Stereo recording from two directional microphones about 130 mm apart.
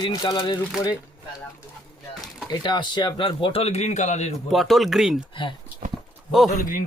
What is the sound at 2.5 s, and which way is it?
Speech, 35° left (ahead or behind).